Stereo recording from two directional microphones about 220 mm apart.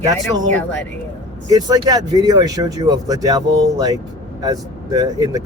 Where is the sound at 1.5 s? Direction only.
20° right (ahead or behind).